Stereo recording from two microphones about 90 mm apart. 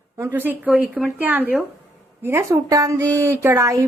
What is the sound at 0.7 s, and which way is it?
Speech, 5° right (ahead or behind).